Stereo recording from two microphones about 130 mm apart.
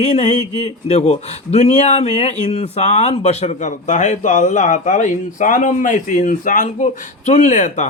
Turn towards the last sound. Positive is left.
turn(degrees=70)  # may be behind; listen again after turning